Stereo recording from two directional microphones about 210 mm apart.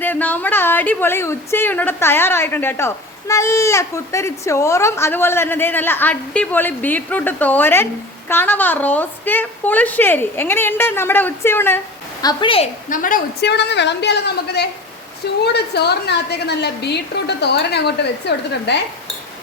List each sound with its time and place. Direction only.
0.0 s a woman's voice: 10° left (ahead or behind); by 12.6 s 25° left (ahead or behind)
12.9 s a woman's voice: 40° left (ahead or behind)